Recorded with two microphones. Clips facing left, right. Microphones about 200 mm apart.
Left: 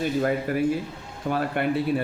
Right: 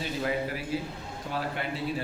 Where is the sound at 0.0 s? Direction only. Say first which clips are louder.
Left 6 dB; 50° left (ahead or behind).